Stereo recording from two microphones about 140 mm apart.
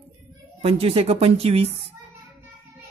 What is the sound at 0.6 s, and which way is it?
Speech, 45° right (ahead or behind).